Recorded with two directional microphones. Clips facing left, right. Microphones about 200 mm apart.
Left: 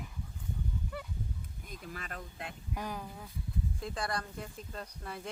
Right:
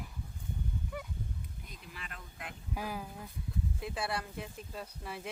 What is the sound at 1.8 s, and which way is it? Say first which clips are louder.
Speech: left 7 dB; 45° left (ahead or behind).